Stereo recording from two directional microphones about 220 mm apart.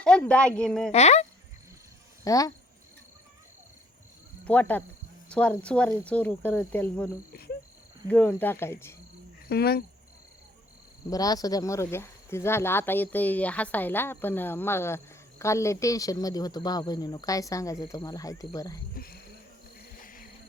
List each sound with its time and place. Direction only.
0.0 s a woman's voice: 5° left (ahead or behind)
0.9 s speech: 30° left (ahead or behind)
2.2 s speech: 15° left (ahead or behind)
4.4 s speech: 5° left (ahead or behind)
9.5 s cricket: 45° left (ahead or behind)
11.1 s speech: 15° left (ahead or behind)
18.9 s cricket: 45° left (ahead or behind)